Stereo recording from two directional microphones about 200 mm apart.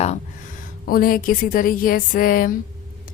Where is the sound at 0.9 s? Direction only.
45° left (ahead or behind).